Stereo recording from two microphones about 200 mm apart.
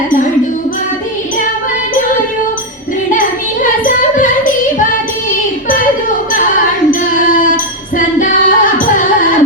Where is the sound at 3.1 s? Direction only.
40° left (ahead or behind).